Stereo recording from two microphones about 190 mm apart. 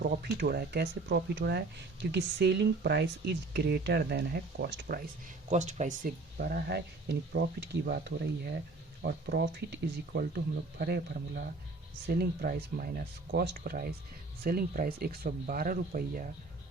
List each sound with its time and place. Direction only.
0.0 s speech: 55° right (ahead or behind)
5.5 s speech: 40° right (ahead or behind); by 7.4 s 60° right (ahead or behind)
9.0 s speech: 60° right (ahead or behind); by 16.3 s 45° right (ahead or behind)